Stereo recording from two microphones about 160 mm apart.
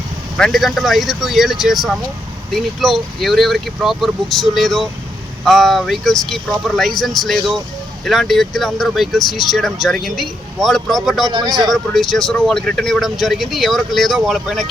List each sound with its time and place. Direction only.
0.3 s speech: centre (ahead or behind)
11.3 s speech: 25° right (ahead or behind)
11.7 s speech: centre (ahead or behind)